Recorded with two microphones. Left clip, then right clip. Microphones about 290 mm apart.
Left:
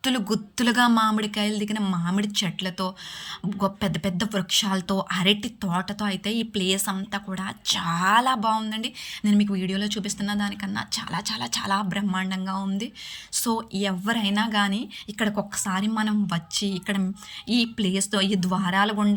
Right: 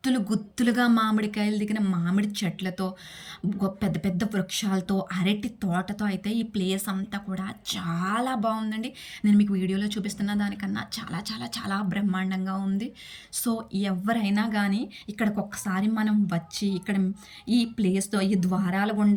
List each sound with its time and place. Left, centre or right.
0.0 s speech: centre